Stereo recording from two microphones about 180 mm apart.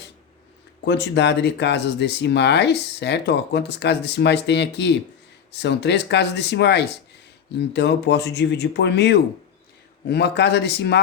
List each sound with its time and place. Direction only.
0.9 s speech: 70° left (ahead or behind)